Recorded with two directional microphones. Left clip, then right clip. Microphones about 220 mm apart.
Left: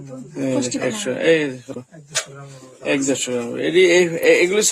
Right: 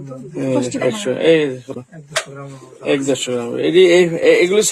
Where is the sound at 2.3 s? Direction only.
45° left (ahead or behind).